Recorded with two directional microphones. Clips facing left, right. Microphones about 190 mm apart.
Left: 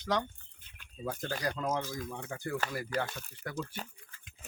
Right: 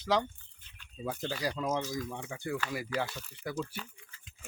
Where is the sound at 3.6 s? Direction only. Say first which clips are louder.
Right 1 dB; 40° left (ahead or behind).